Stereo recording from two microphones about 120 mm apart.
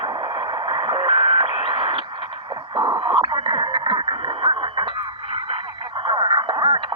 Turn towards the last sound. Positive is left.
turn(degrees=-45)  # may be behind; listen again after turning